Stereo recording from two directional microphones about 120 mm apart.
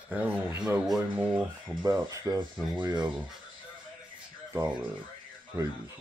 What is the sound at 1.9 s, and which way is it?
Speech, 30° right (ahead or behind).